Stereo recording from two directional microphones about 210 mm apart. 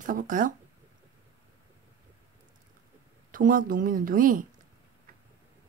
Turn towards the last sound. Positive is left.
turn(degrees=-40)  # may be behind; listen again after turning